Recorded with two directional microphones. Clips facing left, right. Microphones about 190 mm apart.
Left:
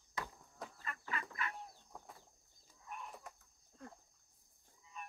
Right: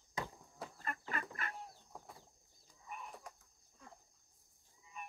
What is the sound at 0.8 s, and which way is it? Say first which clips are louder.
Fowl: right 2 dB; 45° right (ahead or behind).